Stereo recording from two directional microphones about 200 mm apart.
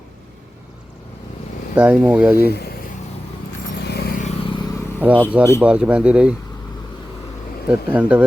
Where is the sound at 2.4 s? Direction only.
55° left (ahead or behind).